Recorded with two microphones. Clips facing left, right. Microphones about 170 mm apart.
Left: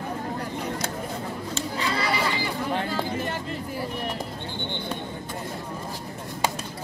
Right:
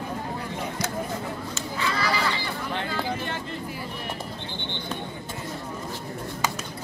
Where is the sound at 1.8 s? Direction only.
35° left (ahead or behind).